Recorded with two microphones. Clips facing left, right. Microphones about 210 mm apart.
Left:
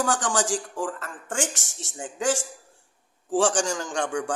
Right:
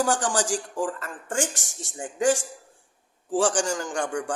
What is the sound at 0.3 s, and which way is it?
A man's voice, 15° right (ahead or behind).